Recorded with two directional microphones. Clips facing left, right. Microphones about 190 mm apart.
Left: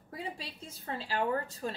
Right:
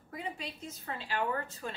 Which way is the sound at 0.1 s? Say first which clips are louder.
Right 1 dB; 35° left (ahead or behind).